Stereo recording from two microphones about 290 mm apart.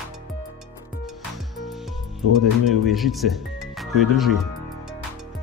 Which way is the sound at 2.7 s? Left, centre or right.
Centre.